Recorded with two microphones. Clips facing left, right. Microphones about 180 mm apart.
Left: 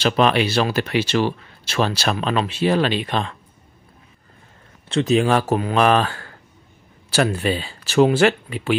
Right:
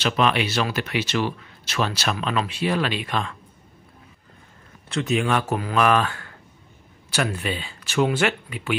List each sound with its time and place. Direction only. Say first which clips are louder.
0.0 s speech: left 4 dB; 35° left (ahead or behind)
4.8 s speech: left 6 dB; 30° left (ahead or behind)